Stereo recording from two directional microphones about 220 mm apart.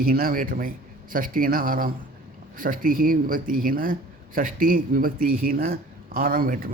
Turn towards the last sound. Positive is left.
turn(degrees=-40)  # may be behind; listen again after turning